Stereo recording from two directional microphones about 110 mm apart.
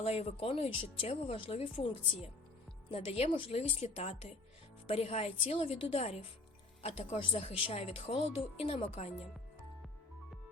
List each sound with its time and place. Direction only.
0.0 s speech: 65° left (ahead or behind)
7.2 s speech: 55° left (ahead or behind)